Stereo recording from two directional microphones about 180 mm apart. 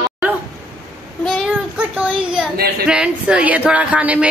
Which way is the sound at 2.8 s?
5° right (ahead or behind).